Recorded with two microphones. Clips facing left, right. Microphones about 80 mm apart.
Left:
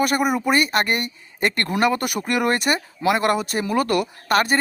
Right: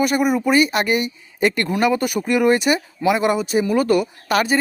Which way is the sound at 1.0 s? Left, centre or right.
Left.